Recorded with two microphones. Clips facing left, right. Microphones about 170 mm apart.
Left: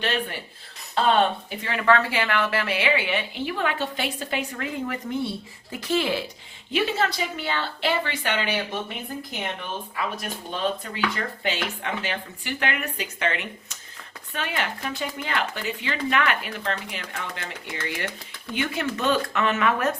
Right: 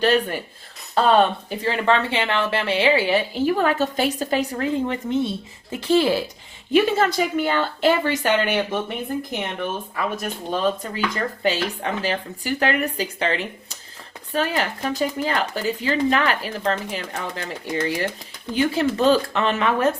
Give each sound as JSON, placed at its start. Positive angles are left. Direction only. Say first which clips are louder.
{"t": 0.0, "sound": "speech", "louder": "right 8 dB", "side_deg": -40}
{"t": 6.7, "sound": "a woman's voice", "louder": "right 7 dB", "side_deg": -45}
{"t": 9.9, "sound": "speech", "louder": "right 4 dB", "side_deg": -40}